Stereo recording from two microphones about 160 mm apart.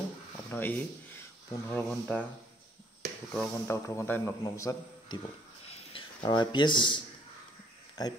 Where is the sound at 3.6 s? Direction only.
15° left (ahead or behind).